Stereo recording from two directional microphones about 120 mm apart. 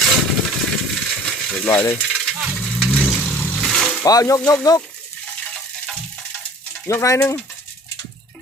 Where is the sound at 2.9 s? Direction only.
10° left (ahead or behind).